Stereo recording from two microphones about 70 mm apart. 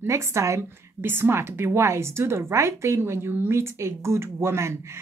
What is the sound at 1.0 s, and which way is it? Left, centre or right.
Speech, right.